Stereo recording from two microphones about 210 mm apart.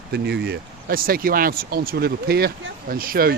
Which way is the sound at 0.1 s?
50° right (ahead or behind).